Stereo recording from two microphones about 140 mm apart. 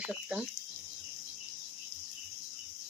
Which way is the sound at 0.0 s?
10° right (ahead or behind).